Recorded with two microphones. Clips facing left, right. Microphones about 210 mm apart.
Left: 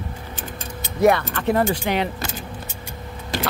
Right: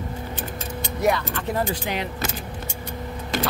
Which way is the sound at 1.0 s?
60° left (ahead or behind).